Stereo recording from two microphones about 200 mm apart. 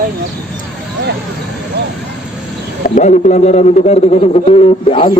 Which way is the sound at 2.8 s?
40° left (ahead or behind).